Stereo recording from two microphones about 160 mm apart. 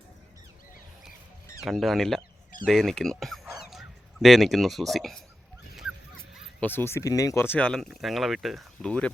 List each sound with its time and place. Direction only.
1.6 s speech: centre (ahead or behind)
6.6 s speech: 15° left (ahead or behind)